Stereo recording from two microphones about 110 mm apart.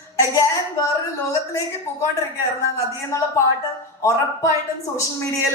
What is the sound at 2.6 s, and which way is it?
A woman's voice, 25° left (ahead or behind).